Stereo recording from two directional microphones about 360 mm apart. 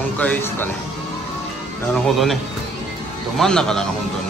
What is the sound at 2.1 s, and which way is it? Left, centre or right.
Speech, centre.